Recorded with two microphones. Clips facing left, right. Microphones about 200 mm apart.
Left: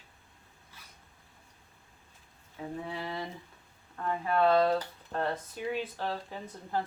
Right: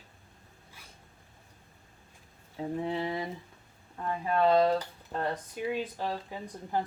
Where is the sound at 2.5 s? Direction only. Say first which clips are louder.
Right 6 dB; 25° right (ahead or behind).